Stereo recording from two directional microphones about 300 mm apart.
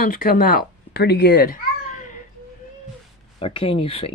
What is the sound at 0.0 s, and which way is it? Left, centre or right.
Speech, left.